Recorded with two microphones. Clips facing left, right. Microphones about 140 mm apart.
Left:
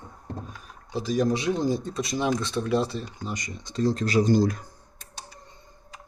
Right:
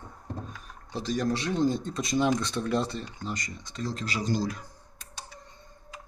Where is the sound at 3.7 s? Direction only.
40° left (ahead or behind).